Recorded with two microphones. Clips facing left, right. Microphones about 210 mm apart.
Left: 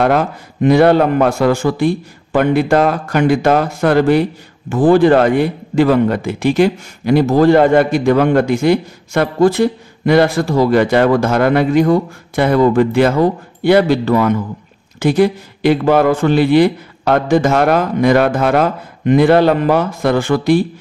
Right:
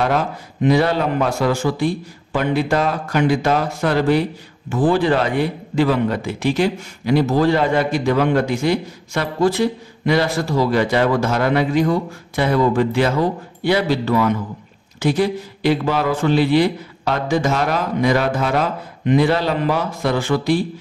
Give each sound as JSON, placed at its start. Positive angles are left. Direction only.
{"t": 0.0, "sound": "a man's voice", "side_deg": 55}